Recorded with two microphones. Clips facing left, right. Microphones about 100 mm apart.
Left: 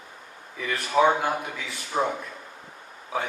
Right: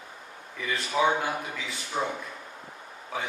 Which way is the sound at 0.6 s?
55° left (ahead or behind).